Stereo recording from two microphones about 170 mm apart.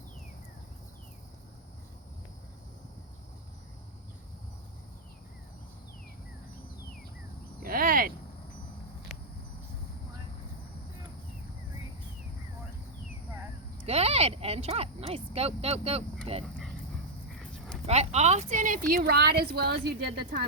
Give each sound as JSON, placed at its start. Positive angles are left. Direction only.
{"t": 7.6, "sound": "cricket", "side_deg": -55}
{"t": 9.1, "sound": "a sound", "side_deg": 0}
{"t": 13.8, "sound": "speech", "side_deg": -35}
{"t": 17.8, "sound": "a woman's voice", "side_deg": -40}